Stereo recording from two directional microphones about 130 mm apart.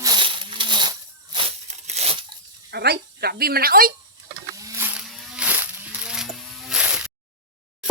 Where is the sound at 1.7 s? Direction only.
60° right (ahead or behind); by 2.4 s 45° right (ahead or behind).